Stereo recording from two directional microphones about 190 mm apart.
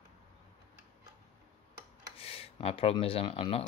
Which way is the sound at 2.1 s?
30° left (ahead or behind).